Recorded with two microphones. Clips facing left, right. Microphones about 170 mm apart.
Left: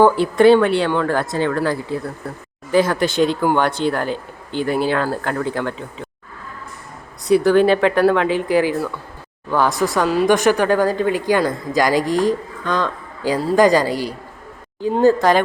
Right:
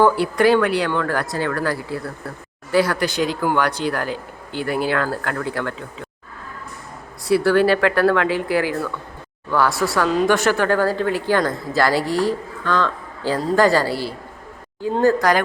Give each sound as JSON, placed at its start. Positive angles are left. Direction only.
{"t": 0.0, "sound": "speech", "side_deg": 25}
{"t": 7.3, "sound": "a woman's voice", "side_deg": 20}